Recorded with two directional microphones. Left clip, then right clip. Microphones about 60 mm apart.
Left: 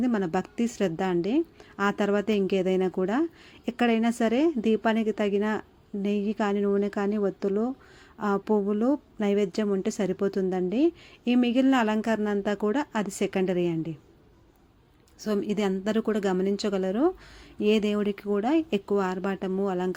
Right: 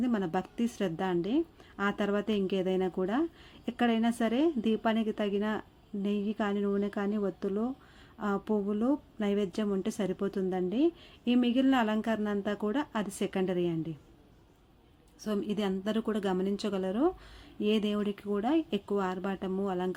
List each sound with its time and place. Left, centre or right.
0.0 s a woman's voice: left
15.2 s a woman's voice: left